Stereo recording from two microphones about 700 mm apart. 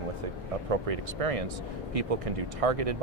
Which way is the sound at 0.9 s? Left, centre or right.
Right.